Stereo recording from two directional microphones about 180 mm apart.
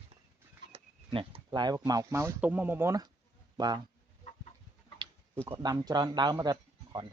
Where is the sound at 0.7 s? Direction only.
30° right (ahead or behind).